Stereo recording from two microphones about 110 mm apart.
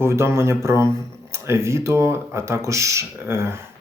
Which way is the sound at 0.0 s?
25° right (ahead or behind).